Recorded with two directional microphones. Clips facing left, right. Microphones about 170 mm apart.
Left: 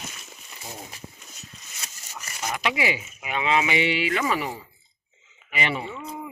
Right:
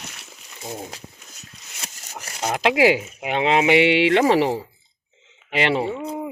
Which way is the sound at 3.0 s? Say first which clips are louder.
Right 7 dB; 70° right (ahead or behind).